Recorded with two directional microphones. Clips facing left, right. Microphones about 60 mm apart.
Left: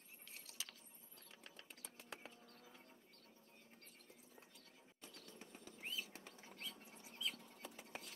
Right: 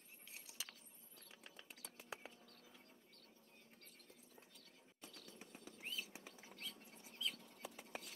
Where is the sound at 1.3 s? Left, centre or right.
Centre.